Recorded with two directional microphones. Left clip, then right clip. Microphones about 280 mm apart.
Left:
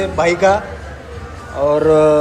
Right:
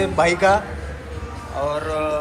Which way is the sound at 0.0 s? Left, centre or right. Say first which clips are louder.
Left 3 dB; centre.